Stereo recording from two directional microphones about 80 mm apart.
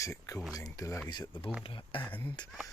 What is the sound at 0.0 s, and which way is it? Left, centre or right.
Speech, left.